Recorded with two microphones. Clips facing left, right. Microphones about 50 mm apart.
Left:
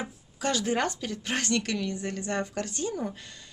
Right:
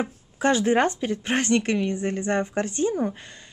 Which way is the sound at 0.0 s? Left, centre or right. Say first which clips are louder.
Right 8 dB; right.